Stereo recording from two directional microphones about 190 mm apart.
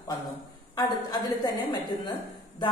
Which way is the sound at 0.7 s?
20° left (ahead or behind).